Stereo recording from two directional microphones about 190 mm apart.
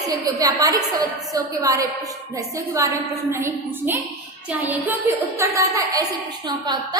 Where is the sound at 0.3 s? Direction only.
20° right (ahead or behind).